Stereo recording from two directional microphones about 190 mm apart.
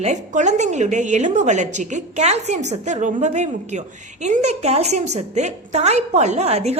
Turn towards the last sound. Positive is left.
turn(degrees=-35)  # may be behind; listen again after turning